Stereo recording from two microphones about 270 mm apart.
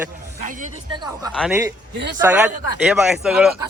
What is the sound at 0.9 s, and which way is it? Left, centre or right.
Speech, centre.